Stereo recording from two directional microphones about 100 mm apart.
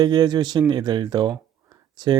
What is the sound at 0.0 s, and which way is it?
Speech, 45° right (ahead or behind).